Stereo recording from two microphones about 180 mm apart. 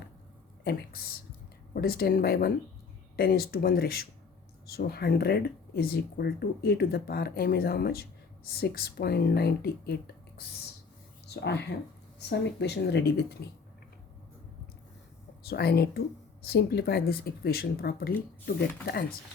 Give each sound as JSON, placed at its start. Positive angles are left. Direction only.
{"t": 0.6, "sound": "a woman's voice", "side_deg": 60}
{"t": 11.3, "sound": "speech", "side_deg": 70}
{"t": 15.4, "sound": "speech", "side_deg": 60}